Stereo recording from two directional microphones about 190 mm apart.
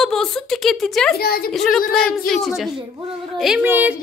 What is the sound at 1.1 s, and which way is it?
Speech, 55° left (ahead or behind).